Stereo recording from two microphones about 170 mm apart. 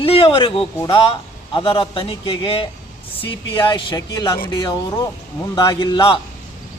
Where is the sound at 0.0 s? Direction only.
30° left (ahead or behind).